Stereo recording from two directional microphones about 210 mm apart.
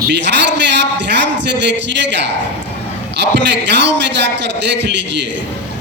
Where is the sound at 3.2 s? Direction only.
55° right (ahead or behind).